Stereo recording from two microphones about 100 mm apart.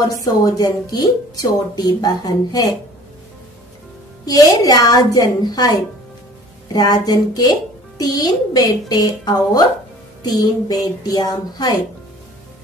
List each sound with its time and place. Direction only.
0.2 s speech: 35° left (ahead or behind)
4.3 s speech: 40° left (ahead or behind)